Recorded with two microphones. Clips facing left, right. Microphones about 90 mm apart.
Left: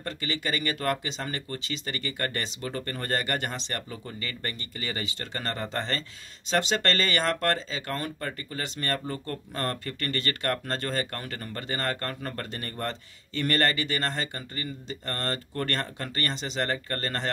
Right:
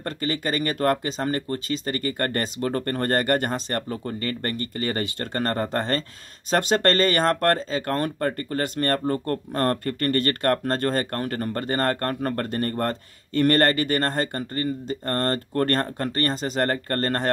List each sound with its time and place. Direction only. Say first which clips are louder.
0.0 s speech: right 5 dB; 45° right (ahead or behind)